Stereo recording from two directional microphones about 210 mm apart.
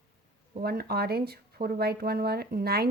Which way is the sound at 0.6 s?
50° right (ahead or behind).